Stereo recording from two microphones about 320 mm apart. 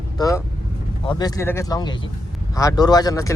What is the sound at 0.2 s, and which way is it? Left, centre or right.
A man's voice, centre.